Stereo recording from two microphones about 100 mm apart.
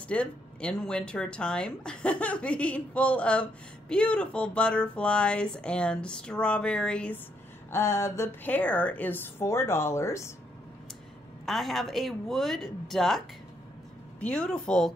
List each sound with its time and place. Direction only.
0.1 s speech: 10° left (ahead or behind)
7.7 s a woman's voice: 25° left (ahead or behind)
11.4 s speech: centre (ahead or behind)
14.2 s speech: 10° left (ahead or behind)